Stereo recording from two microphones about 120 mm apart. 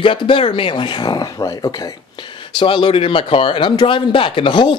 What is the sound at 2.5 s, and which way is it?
Speech, 45° left (ahead or behind).